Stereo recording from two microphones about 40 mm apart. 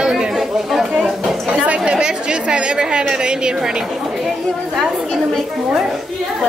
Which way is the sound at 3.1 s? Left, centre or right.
Centre.